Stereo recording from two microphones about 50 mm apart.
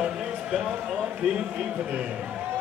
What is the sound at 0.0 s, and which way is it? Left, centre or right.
Speech, centre.